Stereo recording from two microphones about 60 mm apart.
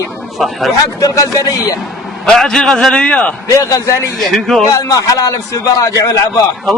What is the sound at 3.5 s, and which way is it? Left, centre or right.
Speech, left.